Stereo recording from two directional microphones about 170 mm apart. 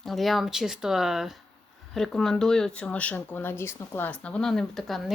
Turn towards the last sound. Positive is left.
turn(degrees=0)  # may be behind; listen again after turning